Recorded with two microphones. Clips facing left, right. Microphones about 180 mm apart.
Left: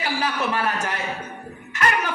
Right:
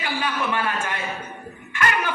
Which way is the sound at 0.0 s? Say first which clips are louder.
Left 1 dB; 35° left (ahead or behind).